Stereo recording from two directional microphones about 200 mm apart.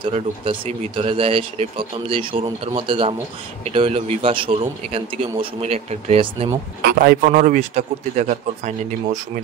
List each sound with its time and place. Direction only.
0.0 s speech: 30° right (ahead or behind)
6.8 s a man's voice: 50° right (ahead or behind)